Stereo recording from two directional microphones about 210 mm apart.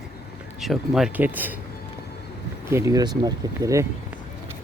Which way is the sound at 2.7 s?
15° right (ahead or behind).